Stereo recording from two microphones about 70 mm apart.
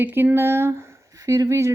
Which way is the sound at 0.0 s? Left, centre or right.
Right.